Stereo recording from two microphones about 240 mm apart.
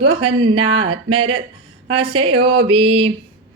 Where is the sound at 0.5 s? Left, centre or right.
Right.